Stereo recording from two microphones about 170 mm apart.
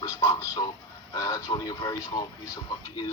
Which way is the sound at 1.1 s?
20° left (ahead or behind).